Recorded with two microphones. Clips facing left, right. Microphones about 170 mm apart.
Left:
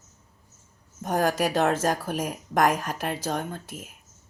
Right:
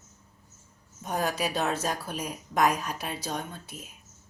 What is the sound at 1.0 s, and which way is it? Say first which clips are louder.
A woman's voice: left 5 dB; 50° left (ahead or behind).